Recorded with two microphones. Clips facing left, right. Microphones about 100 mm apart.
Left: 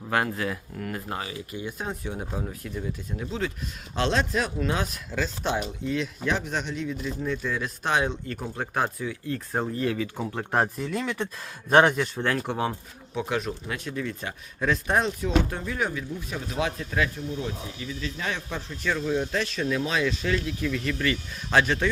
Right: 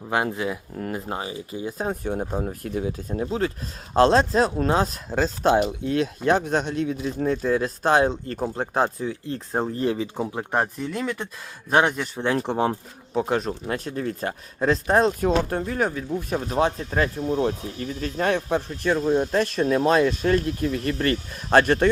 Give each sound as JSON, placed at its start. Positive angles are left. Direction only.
{"t": 0.3, "sound": "speech", "side_deg": -15}
{"t": 10.5, "sound": "speech", "side_deg": 0}
{"t": 12.2, "sound": "speech", "side_deg": -20}
{"t": 13.1, "sound": "speech", "side_deg": -40}
{"t": 17.2, "sound": "speech", "side_deg": -60}